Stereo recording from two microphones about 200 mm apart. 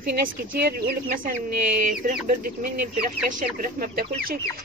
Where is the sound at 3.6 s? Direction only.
45° right (ahead or behind).